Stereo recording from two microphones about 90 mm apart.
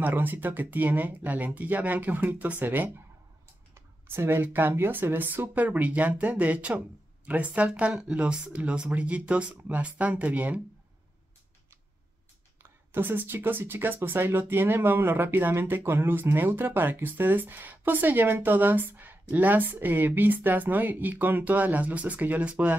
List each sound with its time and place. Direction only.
0.0 s speech: 20° right (ahead or behind)
12.6 s speech: 25° right (ahead or behind)